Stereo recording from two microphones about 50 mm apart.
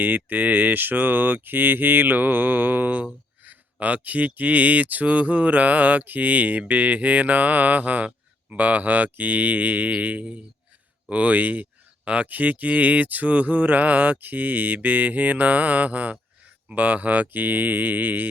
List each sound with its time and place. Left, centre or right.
0.0 s mantra: right
3.4 s a sound: right
4.4 s mantra: right